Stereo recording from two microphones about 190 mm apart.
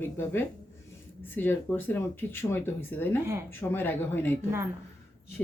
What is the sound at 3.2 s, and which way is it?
Speech, 15° right (ahead or behind).